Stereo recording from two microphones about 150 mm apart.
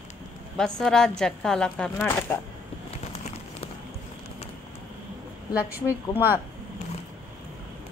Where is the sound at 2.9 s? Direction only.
45° left (ahead or behind).